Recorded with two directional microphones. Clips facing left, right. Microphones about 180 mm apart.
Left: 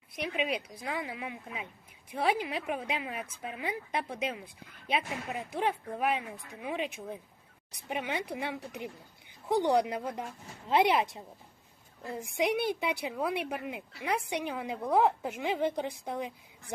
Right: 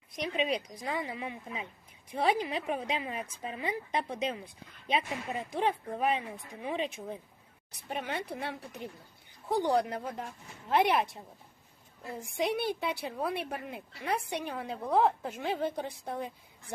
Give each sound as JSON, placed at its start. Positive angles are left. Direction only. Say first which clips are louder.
{"t": 0.2, "sound": "speech", "louder": "right 1 dB", "side_deg": 10}
{"t": 12.4, "sound": "speech", "louder": "left 2 dB", "side_deg": 15}